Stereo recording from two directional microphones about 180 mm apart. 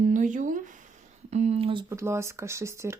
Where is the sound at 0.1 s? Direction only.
45° right (ahead or behind).